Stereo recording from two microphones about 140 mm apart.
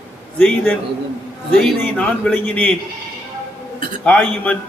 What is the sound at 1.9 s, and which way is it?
Speech, 10° left (ahead or behind).